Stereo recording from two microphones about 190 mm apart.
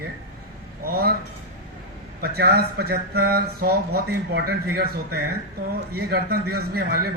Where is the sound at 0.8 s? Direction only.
55° right (ahead or behind).